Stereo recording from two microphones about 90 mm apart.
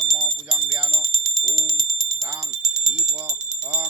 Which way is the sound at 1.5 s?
Centre (ahead or behind).